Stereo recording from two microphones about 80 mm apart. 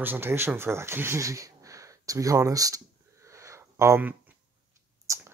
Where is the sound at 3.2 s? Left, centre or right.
Right.